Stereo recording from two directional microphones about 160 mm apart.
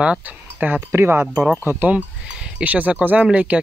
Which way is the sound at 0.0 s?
5° right (ahead or behind).